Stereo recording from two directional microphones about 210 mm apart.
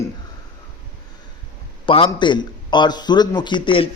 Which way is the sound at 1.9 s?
25° left (ahead or behind).